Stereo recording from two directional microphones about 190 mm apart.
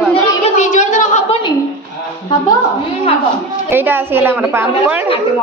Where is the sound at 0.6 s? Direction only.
40° left (ahead or behind).